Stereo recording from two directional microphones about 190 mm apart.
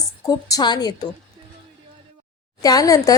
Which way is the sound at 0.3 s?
20° left (ahead or behind).